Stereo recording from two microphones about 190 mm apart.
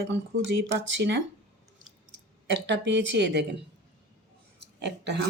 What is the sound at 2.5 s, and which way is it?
Speech, 70° right (ahead or behind).